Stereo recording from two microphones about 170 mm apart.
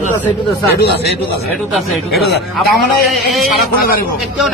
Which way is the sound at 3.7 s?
60° left (ahead or behind).